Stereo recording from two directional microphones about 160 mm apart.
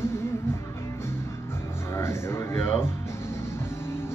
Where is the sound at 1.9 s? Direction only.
15° left (ahead or behind).